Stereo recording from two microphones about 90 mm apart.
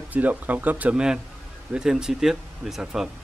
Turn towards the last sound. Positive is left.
turn(degrees=-5)  # may be behind; listen again after turning